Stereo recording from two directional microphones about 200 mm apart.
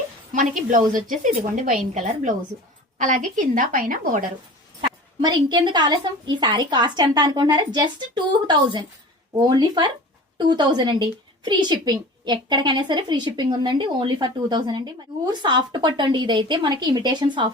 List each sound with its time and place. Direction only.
0.3 s a woman's voice: 40° right (ahead or behind)
5.2 s a woman's voice: 20° right (ahead or behind)